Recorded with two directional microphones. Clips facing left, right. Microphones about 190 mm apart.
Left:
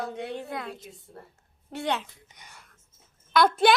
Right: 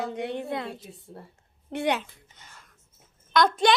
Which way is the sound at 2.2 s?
15° left (ahead or behind).